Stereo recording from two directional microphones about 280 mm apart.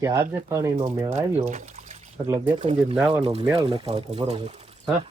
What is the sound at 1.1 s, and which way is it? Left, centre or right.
Speech, right.